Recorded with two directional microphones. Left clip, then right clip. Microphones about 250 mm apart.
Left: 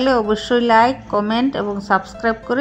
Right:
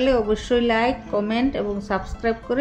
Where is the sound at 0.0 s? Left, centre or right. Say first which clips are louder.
Left 3 dB; centre.